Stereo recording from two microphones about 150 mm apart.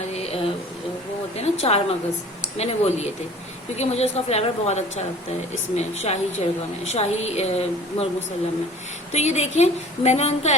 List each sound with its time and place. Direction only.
0.1 s a sound: 45° left (ahead or behind)
2.6 s speech: 45° left (ahead or behind)
9.1 s speech: 45° left (ahead or behind)